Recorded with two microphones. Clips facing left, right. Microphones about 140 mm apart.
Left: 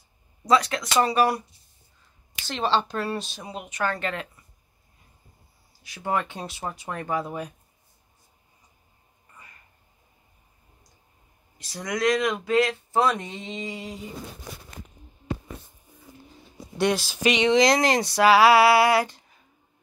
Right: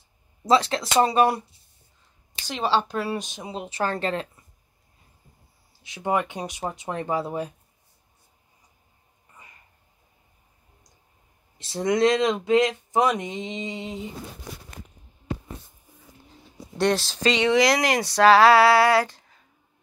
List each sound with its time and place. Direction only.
0.5 s speech: 30° right (ahead or behind)
2.4 s speech: 10° right (ahead or behind); by 4.3 s 35° right (ahead or behind)
5.7 s speech: 20° right (ahead or behind)
11.5 s speech: 25° right (ahead or behind)
16.7 s speech: 5° left (ahead or behind); by 18.0 s 25° left (ahead or behind)
18.0 s speech: 10° left (ahead or behind)